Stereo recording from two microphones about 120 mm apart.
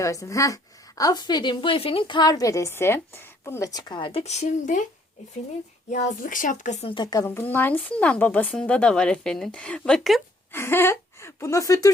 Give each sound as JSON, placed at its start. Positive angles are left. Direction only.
{"t": 0.0, "sound": "a woman's voice", "side_deg": 25}
{"t": 4.2, "sound": "speech", "side_deg": 65}
{"t": 5.9, "sound": "speech", "side_deg": 90}
{"t": 6.8, "sound": "a woman's voice", "side_deg": 40}
{"t": 7.3, "sound": "speech", "side_deg": 15}
{"t": 10.5, "sound": "speech", "side_deg": 20}